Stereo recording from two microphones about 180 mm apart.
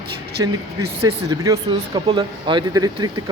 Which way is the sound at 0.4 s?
20° right (ahead or behind).